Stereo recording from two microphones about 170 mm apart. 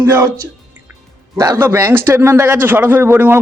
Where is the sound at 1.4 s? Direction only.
20° right (ahead or behind).